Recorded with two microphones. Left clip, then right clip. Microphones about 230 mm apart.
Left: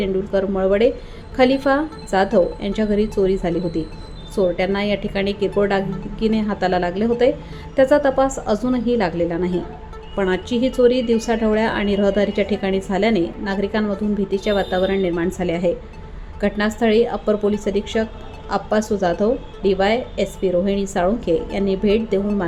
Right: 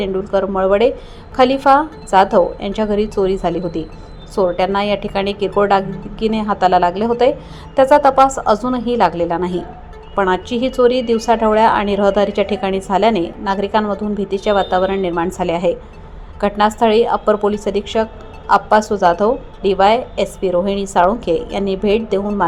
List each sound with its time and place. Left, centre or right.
0.0 s a woman's voice: centre